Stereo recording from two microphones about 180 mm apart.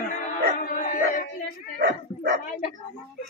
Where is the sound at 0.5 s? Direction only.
50° left (ahead or behind).